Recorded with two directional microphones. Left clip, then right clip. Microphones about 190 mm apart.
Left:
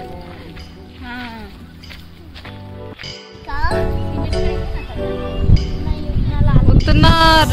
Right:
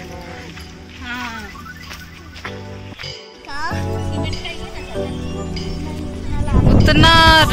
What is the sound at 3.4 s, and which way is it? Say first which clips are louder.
Music: left 3 dB; 50° left (ahead or behind).